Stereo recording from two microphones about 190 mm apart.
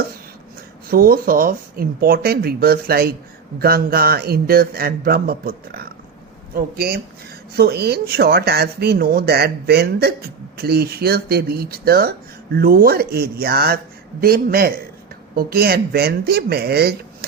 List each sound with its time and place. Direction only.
0.9 s speech: 50° right (ahead or behind)